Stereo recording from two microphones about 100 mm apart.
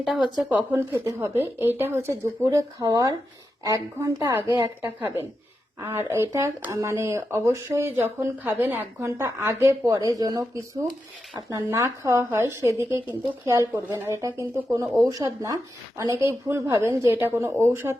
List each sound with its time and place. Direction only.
0.0 s speech: 5° right (ahead or behind)
0.4 s speech: 20° right (ahead or behind)
2.8 s speech: 40° right (ahead or behind)
11.7 s speech: 30° right (ahead or behind)